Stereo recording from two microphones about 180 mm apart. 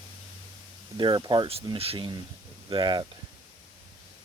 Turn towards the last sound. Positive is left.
turn(degrees=-25)  # may be behind; listen again after turning